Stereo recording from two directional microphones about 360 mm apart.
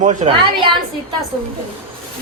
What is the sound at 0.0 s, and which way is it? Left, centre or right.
Speech, centre.